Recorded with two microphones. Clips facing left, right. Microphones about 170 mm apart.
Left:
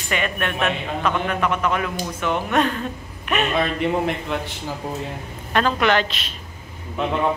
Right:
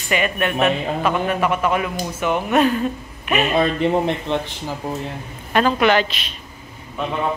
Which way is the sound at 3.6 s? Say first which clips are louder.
Right 5 dB; 30° right (ahead or behind).